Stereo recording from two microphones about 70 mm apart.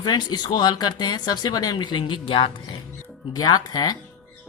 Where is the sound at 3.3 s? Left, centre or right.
Left.